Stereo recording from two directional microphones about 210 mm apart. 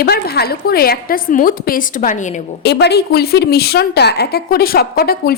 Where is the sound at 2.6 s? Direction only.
50° left (ahead or behind).